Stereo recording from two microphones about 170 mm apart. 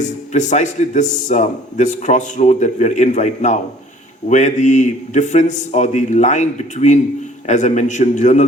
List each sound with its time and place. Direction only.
0.0 s a man's voice: 45° left (ahead or behind)